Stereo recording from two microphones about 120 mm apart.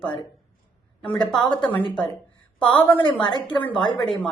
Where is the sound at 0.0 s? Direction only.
40° left (ahead or behind).